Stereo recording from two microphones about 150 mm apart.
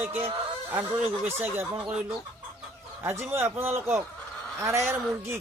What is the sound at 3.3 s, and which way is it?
Speech, 15° right (ahead or behind).